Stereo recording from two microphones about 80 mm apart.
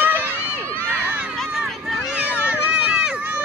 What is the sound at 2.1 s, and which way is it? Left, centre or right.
Run, centre.